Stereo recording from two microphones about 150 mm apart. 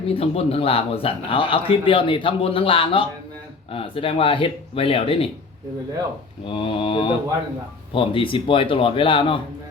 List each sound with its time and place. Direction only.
0.1 s a man's voice: 40° left (ahead or behind)
6.5 s a man's voice: 35° left (ahead or behind)